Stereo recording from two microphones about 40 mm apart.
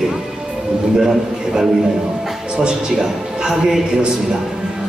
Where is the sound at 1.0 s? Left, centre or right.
Centre.